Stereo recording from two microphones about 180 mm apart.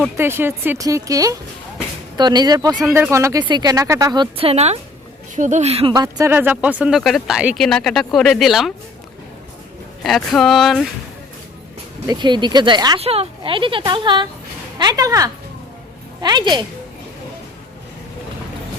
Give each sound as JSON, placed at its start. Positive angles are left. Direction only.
{"t": 0.2, "sound": "speech", "side_deg": -15}
{"t": 5.9, "sound": "speech", "side_deg": -20}
{"t": 10.0, "sound": "speech", "side_deg": 0}
{"t": 12.0, "sound": "speech", "side_deg": -25}
{"t": 13.0, "sound": "speech", "side_deg": -35}